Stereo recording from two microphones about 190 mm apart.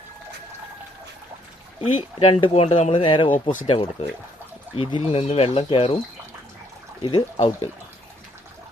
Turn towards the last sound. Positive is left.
turn(degrees=25)  # may be behind; listen again after turning